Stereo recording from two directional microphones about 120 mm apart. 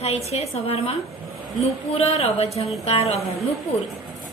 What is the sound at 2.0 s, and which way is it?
A woman's voice, 55° left (ahead or behind).